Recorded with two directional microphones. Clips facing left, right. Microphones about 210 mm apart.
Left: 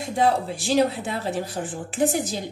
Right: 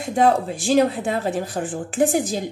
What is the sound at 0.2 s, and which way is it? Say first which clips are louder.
A woman's voice: right 4 dB; 45° right (ahead or behind).